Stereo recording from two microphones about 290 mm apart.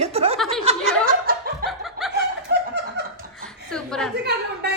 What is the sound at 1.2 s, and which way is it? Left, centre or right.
Snicker, right.